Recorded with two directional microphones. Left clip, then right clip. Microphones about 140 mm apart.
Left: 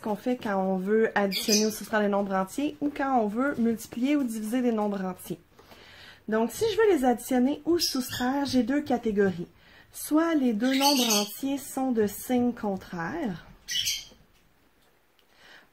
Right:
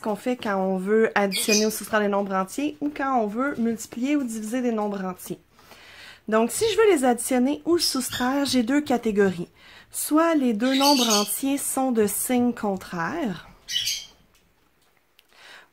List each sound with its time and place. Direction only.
0.0 s speech: 25° right (ahead or behind)